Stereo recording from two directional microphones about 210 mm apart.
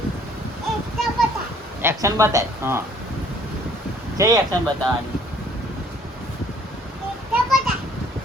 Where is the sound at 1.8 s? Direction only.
15° right (ahead or behind).